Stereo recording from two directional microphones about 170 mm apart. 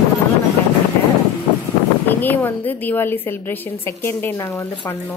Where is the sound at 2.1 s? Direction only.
10° left (ahead or behind).